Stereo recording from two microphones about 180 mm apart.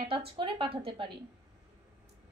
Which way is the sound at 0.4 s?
30° right (ahead or behind).